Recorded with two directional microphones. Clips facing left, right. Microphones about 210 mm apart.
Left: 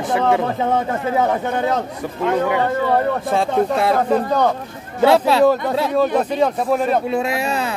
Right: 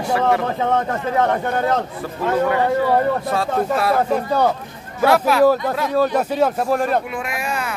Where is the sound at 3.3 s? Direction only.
25° left (ahead or behind).